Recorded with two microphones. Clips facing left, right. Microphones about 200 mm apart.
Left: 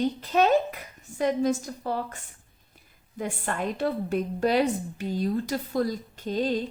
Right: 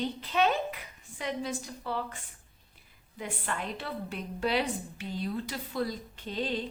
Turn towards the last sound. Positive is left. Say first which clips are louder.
# left 7 dB
turn(degrees=45)  # may be behind; listen again after turning